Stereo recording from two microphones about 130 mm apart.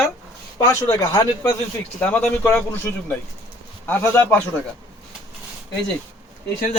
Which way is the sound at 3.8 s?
20° left (ahead or behind).